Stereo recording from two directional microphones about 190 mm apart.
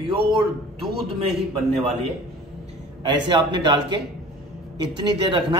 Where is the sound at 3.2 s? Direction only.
25° right (ahead or behind).